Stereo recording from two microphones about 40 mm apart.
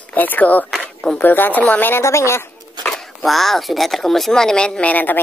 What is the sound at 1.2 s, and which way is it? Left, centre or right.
Speech, left.